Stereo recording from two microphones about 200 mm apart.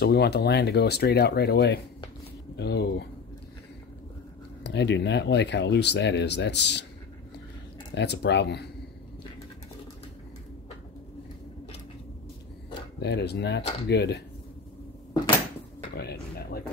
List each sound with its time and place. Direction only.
0.0 s speech: 55° left (ahead or behind)
4.6 s speech: 60° left (ahead or behind)
7.9 s speech: 60° left (ahead or behind)
13.0 s speech: 55° left (ahead or behind)
16.0 s speech: 50° left (ahead or behind)